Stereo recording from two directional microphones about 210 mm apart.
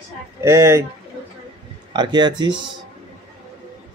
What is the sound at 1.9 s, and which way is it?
Speech, 20° right (ahead or behind).